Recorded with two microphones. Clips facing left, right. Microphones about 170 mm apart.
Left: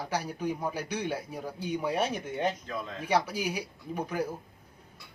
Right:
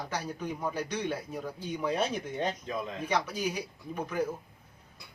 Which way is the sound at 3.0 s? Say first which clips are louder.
Left 3 dB; 10° left (ahead or behind).